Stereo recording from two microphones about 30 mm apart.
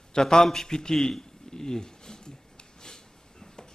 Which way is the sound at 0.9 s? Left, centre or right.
Centre.